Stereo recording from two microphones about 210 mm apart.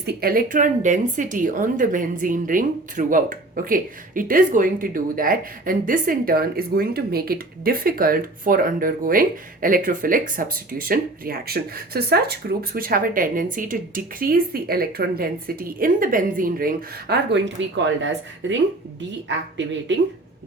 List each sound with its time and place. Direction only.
0.0 s a woman's voice: 50° right (ahead or behind)